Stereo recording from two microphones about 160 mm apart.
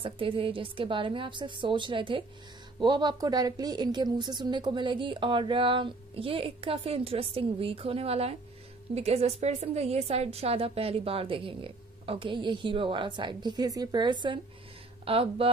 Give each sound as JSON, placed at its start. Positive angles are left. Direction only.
{"t": 0.0, "sound": "speech", "side_deg": -35}